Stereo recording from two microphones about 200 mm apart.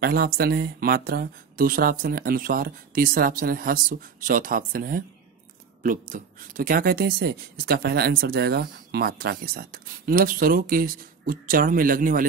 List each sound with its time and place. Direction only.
0.0 s speech: 50° right (ahead or behind)